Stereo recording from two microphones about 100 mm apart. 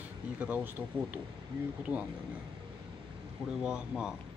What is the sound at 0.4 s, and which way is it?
Speech, 15° right (ahead or behind).